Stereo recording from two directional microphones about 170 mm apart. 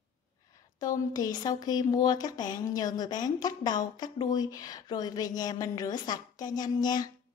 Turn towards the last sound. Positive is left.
turn(degrees=20)  # may be behind; listen again after turning